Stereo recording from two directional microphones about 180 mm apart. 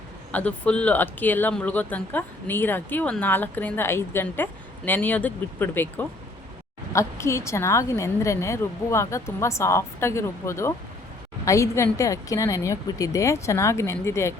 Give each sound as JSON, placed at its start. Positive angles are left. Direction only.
{"t": 0.3, "sound": "speech", "side_deg": 5}